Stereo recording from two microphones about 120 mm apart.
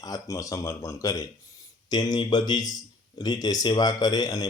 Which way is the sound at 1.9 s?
35° left (ahead or behind).